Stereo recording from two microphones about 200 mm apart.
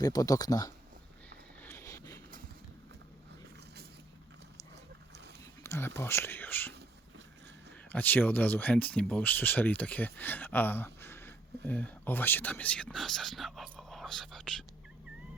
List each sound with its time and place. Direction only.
0.0 s speech: 20° left (ahead or behind)
1.6 s vehicle: 15° left (ahead or behind)
5.6 s speech: 15° left (ahead or behind)
7.9 s speech: 10° left (ahead or behind)